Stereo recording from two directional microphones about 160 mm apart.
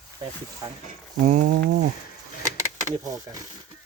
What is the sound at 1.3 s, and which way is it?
Speech, 55° right (ahead or behind).